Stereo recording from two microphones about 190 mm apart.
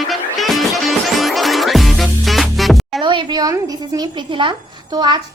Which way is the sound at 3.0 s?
25° right (ahead or behind).